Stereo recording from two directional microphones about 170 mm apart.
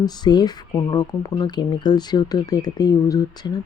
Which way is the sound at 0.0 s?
25° left (ahead or behind).